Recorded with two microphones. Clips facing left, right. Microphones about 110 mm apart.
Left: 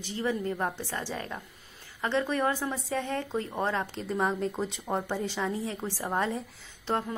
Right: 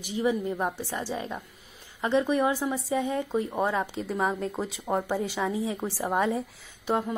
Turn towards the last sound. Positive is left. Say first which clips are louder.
# right 3 dB
turn(degrees=-15)  # may be behind; listen again after turning